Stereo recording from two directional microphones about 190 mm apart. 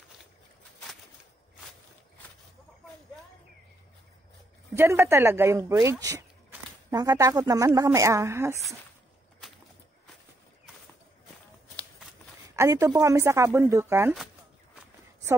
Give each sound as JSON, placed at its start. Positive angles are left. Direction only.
{"t": 4.7, "sound": "speech", "side_deg": -15}
{"t": 12.5, "sound": "speech", "side_deg": -15}